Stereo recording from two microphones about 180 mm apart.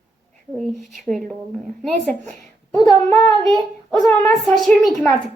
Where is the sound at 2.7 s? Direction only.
20° left (ahead or behind).